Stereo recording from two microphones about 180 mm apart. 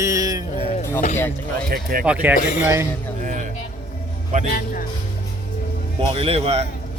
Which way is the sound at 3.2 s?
45° right (ahead or behind).